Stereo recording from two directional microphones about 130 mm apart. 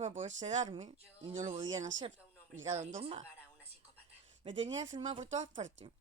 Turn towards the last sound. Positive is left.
turn(degrees=-65)  # may be behind; listen again after turning